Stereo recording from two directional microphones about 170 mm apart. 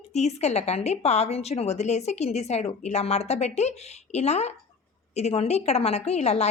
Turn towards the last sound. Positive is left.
turn(degrees=40)  # may be behind; listen again after turning